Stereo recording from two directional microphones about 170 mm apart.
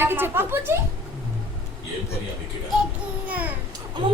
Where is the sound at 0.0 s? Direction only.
15° right (ahead or behind).